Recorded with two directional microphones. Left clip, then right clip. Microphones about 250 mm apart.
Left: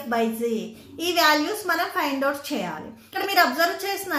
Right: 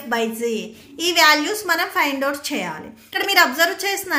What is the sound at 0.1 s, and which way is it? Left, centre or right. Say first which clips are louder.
A woman's voice: right 2 dB; right.